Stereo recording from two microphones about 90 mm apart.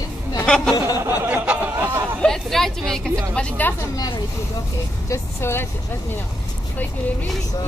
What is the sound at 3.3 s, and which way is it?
Speech, 15° left (ahead or behind).